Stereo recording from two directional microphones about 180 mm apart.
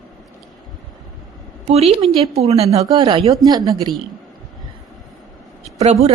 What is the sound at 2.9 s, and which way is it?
A woman's voice, 25° right (ahead or behind).